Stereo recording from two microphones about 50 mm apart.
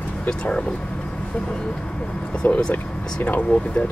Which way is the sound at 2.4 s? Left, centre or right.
Left.